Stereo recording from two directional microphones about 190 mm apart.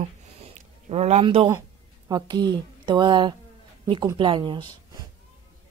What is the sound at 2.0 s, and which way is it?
A woman's voice, 20° right (ahead or behind).